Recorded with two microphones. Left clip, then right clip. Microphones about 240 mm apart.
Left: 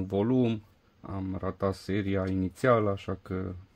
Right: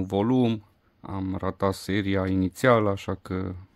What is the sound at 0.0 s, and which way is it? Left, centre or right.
Speech, right.